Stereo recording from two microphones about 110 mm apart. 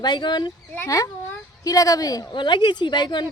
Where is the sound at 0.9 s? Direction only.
30° left (ahead or behind).